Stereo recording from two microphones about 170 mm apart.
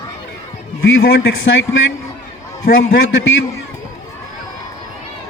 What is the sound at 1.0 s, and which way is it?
A man's voice, 90° left.